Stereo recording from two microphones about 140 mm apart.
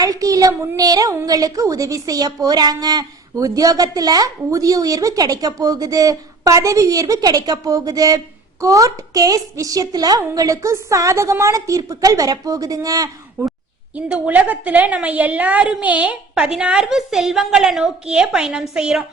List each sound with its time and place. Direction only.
0.0 s a woman's voice: 25° right (ahead or behind)
13.9 s a woman's voice: 10° right (ahead or behind)